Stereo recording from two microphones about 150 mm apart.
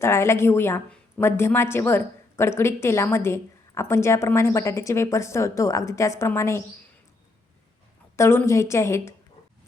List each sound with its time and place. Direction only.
0.0 s a woman's voice: 15° left (ahead or behind)
8.1 s a woman's voice: 15° left (ahead or behind)